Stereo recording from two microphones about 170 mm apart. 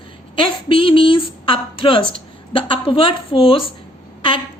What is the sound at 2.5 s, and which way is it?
A woman's voice, 30° left (ahead or behind).